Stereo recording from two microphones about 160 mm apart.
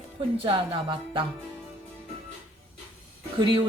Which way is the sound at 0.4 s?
30° right (ahead or behind).